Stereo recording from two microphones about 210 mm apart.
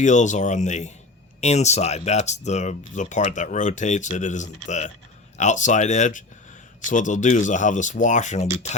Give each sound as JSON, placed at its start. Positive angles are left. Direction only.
{"t": 0.0, "sound": "speech", "side_deg": 35}